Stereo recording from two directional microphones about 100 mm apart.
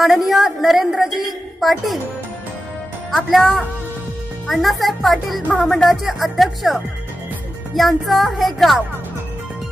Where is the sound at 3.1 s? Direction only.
Centre (ahead or behind).